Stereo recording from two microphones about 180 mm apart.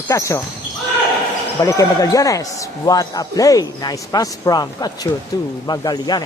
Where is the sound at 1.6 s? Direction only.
20° left (ahead or behind).